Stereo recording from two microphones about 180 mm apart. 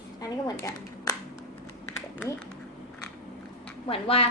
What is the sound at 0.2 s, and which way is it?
Speech, 20° left (ahead or behind).